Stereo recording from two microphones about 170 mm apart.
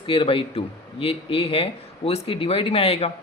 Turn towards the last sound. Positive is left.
turn(degrees=35)  # may be behind; listen again after turning